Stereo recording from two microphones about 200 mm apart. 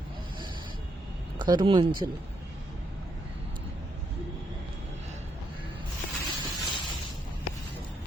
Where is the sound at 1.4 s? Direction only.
20° right (ahead or behind).